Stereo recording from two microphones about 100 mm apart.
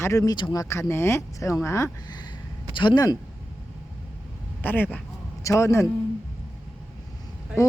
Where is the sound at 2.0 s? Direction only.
45° left (ahead or behind).